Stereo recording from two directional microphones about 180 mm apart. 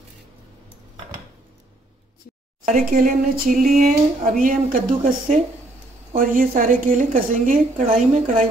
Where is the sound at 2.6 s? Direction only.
45° right (ahead or behind).